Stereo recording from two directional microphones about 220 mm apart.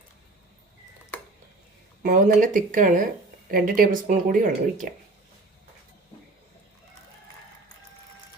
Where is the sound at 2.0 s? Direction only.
35° right (ahead or behind).